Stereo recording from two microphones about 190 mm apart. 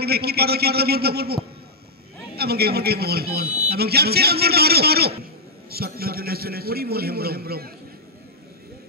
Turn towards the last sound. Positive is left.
turn(degrees=-55)  # may be behind; listen again after turning